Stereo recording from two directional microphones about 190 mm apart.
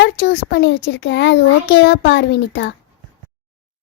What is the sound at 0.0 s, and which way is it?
A child's voice, 65° left (ahead or behind).